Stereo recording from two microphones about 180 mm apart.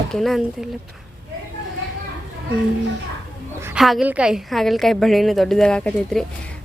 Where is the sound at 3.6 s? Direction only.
5° right (ahead or behind).